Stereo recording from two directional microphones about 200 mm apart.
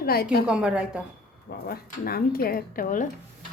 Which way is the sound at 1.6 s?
50° left (ahead or behind).